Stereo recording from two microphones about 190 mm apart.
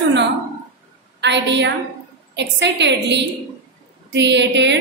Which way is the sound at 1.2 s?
65° right (ahead or behind).